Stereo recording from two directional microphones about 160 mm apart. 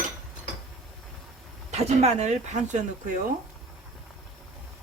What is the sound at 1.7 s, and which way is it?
Speech, 45° right (ahead or behind).